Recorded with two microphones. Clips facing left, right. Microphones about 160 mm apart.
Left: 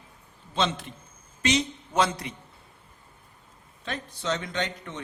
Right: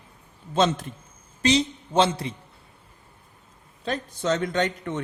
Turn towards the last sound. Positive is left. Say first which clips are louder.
# right 6 dB
turn(degrees=-50)  # may be behind; listen again after turning